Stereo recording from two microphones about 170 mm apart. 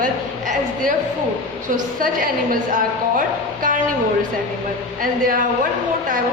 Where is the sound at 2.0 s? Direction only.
55° right (ahead or behind).